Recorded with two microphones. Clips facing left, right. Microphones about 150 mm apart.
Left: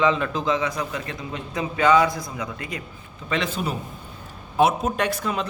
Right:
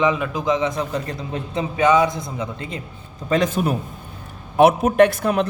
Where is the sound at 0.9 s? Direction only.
35° right (ahead or behind).